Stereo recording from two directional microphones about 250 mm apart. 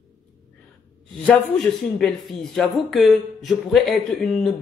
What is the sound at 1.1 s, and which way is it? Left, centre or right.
A man's voice, centre.